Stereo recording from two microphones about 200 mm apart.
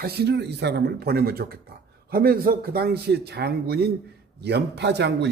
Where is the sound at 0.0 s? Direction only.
55° right (ahead or behind).